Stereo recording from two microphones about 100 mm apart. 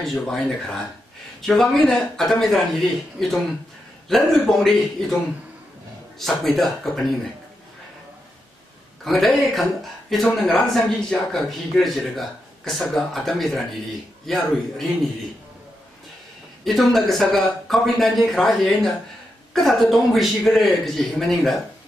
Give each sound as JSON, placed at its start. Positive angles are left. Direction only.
{"t": 0.0, "sound": "a man's voice", "side_deg": 5}
{"t": 9.0, "sound": "a man's voice", "side_deg": 0}
{"t": 16.6, "sound": "a man's voice", "side_deg": 0}